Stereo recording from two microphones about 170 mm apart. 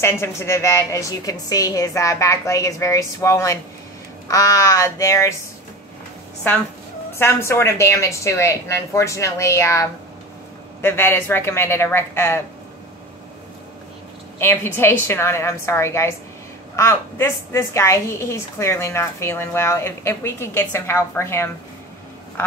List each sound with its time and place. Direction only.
0.0 s a woman's voice: 15° left (ahead or behind)
6.5 s a woman's voice: 10° left (ahead or behind)
14.4 s a woman's voice: 10° left (ahead or behind)